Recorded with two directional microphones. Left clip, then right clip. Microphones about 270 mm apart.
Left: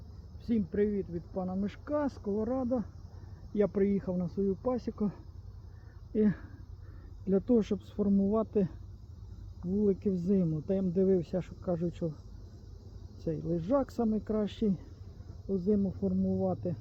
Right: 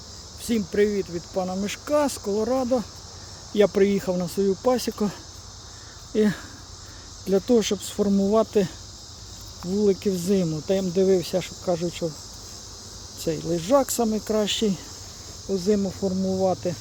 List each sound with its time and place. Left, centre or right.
0.4 s speech: centre
6.1 s speech: centre
9.8 s speech: centre
13.2 s speech: centre
16.0 s speech: centre